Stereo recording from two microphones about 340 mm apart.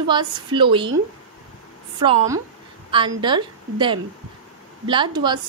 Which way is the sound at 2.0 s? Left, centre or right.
Centre.